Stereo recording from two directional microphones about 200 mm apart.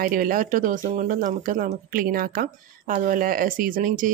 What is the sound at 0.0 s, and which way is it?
Speech, 45° right (ahead or behind).